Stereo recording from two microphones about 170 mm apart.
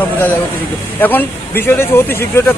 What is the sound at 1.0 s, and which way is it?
Speech, 10° left (ahead or behind).